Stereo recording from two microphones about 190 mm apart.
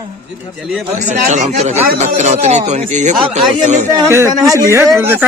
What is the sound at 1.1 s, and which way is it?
Speech, 40° right (ahead or behind).